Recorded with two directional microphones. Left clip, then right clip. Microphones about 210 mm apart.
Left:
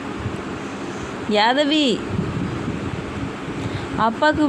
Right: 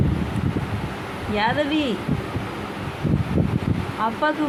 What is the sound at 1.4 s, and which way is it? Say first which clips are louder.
Speech: left 5 dB; 35° left (ahead or behind).